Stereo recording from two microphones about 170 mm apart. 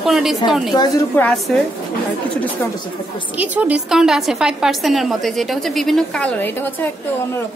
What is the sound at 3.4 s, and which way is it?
A woman's voice, 10° right (ahead or behind).